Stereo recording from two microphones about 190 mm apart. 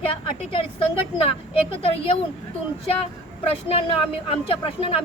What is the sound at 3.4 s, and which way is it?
A woman's voice, 30° left (ahead or behind).